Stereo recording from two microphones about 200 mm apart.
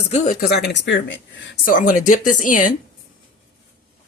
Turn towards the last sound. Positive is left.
turn(degrees=40)  # may be behind; listen again after turning